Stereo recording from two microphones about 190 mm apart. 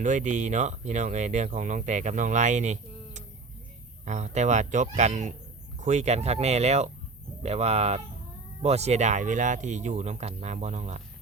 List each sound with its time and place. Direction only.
0.0 s speech: 40° right (ahead or behind)